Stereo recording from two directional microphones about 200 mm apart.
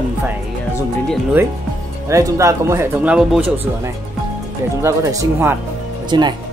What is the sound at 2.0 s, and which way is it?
Speech, 15° right (ahead or behind).